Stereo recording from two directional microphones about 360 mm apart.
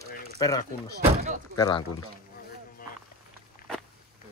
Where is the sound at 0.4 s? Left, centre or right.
Centre.